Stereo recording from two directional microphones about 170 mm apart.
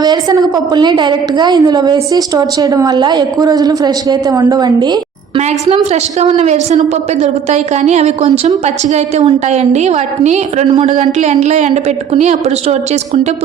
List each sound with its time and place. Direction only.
0.0 s a woman's voice: 25° right (ahead or behind)
5.6 s a woman's voice: 35° right (ahead or behind)
10.9 s a woman's voice: 45° right (ahead or behind)